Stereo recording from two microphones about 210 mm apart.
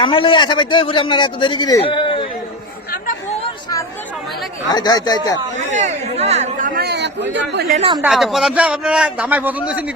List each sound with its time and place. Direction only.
0.0 s speech: 25° left (ahead or behind)
4.7 s speech: 20° left (ahead or behind)
5.5 s speech: 35° right (ahead or behind)
7.8 s a woman's voice: 25° right (ahead or behind)
8.0 s a man's voice: centre (ahead or behind)